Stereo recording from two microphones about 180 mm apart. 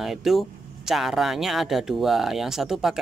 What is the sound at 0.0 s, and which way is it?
Speech, centre (ahead or behind).